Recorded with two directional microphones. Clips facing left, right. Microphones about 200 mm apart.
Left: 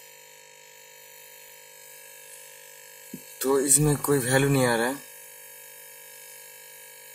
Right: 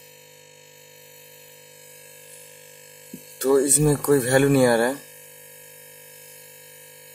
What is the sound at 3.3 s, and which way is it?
Speech, 45° right (ahead or behind).